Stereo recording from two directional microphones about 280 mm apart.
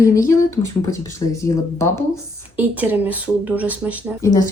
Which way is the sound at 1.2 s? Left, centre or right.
Centre.